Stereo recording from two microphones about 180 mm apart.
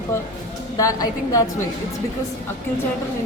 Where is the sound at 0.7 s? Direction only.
20° left (ahead or behind).